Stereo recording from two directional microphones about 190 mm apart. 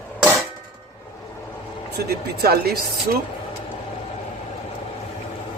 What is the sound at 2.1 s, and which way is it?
Speech, 55° right (ahead or behind).